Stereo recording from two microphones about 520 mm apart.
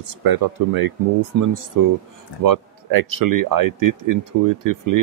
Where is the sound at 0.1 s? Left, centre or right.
Right.